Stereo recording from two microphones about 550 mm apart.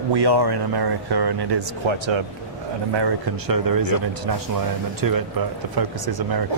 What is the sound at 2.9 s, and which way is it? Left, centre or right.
Speech, right.